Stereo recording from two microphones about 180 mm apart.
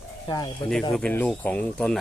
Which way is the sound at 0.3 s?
25° left (ahead or behind).